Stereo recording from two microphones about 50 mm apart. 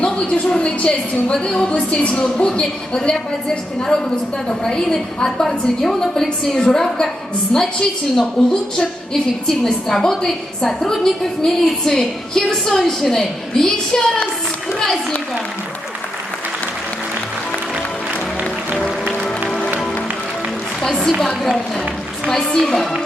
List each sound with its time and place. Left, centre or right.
0.0 s a woman's voice: left
19.5 s music: centre
20.8 s a sound: centre
21.2 s a woman's voice: centre